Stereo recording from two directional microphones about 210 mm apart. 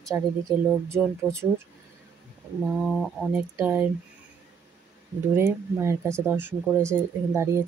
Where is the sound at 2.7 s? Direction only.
Centre (ahead or behind).